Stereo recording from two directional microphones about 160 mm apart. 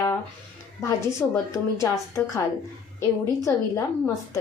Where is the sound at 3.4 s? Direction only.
20° left (ahead or behind).